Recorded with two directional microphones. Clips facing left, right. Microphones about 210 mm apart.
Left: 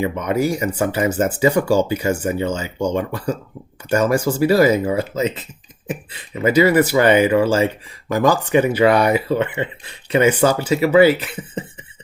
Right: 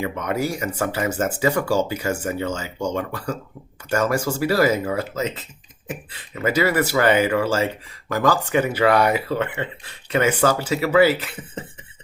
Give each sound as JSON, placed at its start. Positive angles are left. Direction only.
{"t": 0.0, "sound": "speech", "side_deg": 15}